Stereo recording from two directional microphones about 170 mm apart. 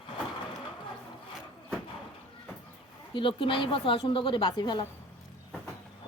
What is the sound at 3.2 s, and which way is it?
Speech, 30° left (ahead or behind).